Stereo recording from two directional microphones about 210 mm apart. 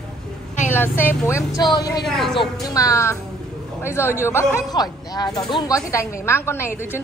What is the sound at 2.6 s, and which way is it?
Speech, 15° left (ahead or behind).